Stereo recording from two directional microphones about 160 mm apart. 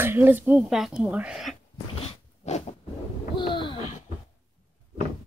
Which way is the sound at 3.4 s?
30° left (ahead or behind).